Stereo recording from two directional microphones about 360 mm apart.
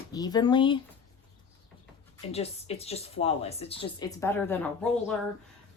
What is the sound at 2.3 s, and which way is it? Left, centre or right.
Speech, centre.